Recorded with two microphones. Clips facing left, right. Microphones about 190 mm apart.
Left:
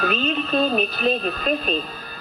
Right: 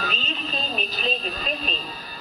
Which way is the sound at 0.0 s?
60° left (ahead or behind).